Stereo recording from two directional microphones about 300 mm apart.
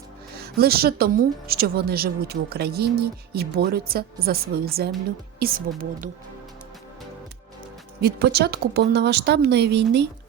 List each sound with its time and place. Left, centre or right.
0.3 s a woman's voice: right
8.0 s a woman's voice: right